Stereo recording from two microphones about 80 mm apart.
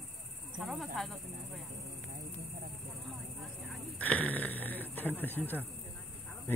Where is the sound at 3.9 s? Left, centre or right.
Centre.